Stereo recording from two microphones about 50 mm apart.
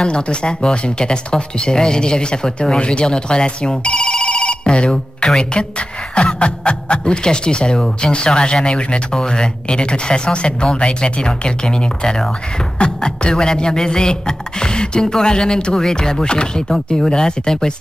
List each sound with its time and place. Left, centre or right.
0.0 s speech: centre